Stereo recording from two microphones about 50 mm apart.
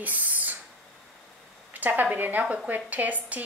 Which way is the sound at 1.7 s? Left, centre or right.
Right.